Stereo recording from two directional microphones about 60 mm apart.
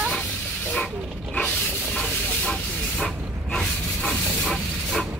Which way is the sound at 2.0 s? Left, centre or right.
Centre.